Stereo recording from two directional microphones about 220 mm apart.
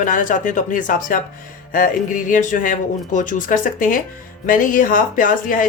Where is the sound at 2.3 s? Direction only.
35° left (ahead or behind).